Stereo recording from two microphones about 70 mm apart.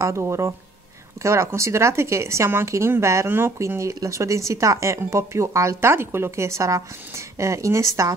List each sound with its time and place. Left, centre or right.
0.0 s speech: right
3.5 s speech: right